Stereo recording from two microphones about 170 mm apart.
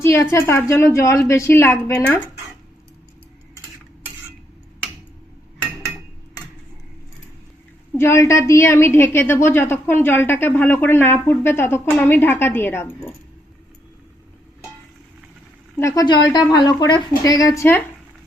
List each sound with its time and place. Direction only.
0.0 s a woman's voice: 15° left (ahead or behind)
7.9 s a woman's voice: 15° left (ahead or behind)
15.8 s a woman's voice: 20° left (ahead or behind)